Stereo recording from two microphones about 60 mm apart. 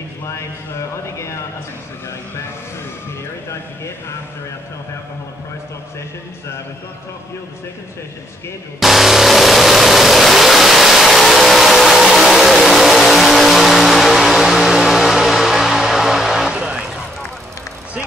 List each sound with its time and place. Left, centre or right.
0.3 s a man's voice: left
8.7 s vehicle: centre
16.5 s vehicle: centre